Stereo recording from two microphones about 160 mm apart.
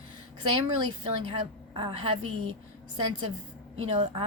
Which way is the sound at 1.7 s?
35° right (ahead or behind).